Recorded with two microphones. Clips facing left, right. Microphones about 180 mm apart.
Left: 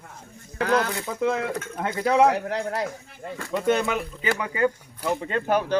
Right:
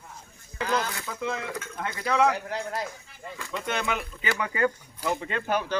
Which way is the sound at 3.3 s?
45° left (ahead or behind).